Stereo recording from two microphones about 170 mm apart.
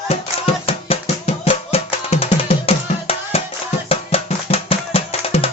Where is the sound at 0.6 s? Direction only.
35° left (ahead or behind).